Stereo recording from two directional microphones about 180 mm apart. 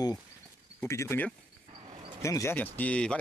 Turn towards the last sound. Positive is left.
turn(degrees=5)  # may be behind; listen again after turning